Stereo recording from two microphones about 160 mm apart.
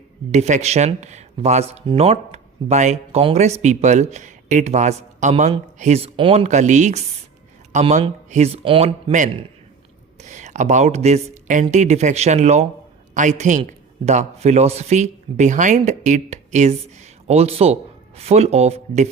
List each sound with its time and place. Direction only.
0.3 s speech: 45° right (ahead or behind)